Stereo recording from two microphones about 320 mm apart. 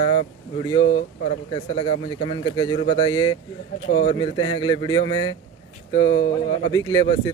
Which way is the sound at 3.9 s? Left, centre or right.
Left.